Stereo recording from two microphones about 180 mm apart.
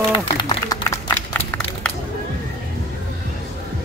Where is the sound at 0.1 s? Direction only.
25° left (ahead or behind).